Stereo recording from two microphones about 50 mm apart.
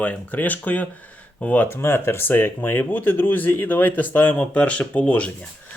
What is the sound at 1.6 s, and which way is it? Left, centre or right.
Speech, left.